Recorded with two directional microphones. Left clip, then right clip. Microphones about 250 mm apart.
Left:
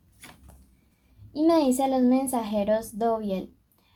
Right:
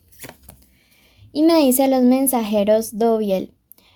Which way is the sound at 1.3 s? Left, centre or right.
Right.